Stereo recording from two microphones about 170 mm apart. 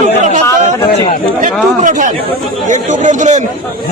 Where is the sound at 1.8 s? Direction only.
50° right (ahead or behind).